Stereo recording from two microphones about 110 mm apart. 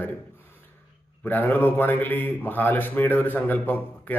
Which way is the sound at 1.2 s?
15° left (ahead or behind).